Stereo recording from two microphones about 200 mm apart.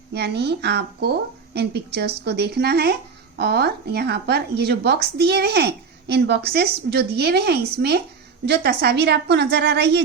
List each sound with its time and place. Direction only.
0.1 s a woman's voice: 55° right (ahead or behind)